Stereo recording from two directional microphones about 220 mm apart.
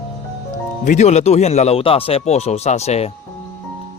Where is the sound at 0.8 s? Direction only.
30° left (ahead or behind).